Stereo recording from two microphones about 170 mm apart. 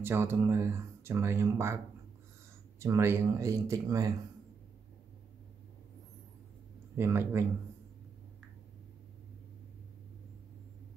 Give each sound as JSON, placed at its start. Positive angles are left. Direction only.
{"t": 0.0, "sound": "speech", "side_deg": -15}
{"t": 2.8, "sound": "speech", "side_deg": -15}
{"t": 7.0, "sound": "speech", "side_deg": -15}